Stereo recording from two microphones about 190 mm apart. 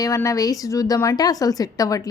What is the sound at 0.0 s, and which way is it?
A woman's voice, 15° left (ahead or behind).